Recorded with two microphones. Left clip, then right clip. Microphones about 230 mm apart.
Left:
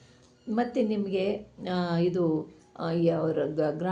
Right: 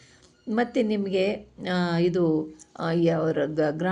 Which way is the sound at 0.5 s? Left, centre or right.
Right.